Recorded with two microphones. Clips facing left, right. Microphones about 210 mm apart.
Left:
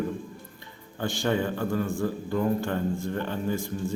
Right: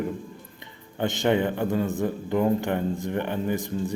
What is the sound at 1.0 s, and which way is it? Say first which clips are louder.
A man's voice: right 4 dB; 20° right (ahead or behind).